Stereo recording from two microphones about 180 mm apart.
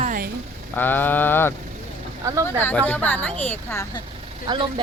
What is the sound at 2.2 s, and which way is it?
Speech, 15° right (ahead or behind).